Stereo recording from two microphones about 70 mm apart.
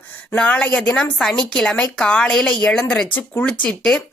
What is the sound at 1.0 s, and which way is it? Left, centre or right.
A woman's voice, centre.